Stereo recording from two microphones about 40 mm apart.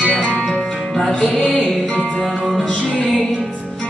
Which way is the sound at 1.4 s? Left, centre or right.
Left.